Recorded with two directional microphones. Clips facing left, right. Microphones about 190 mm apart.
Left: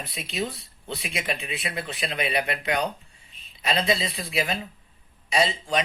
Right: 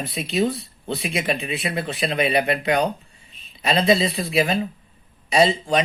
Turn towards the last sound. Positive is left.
turn(degrees=-35)  # may be behind; listen again after turning